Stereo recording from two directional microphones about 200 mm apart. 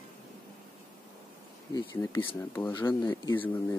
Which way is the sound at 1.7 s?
20° left (ahead or behind).